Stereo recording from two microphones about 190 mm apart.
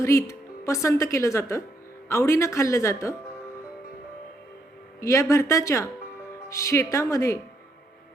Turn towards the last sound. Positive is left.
turn(degrees=15)  # may be behind; listen again after turning